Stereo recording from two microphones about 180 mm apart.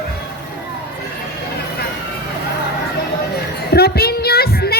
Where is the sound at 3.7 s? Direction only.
60° left (ahead or behind).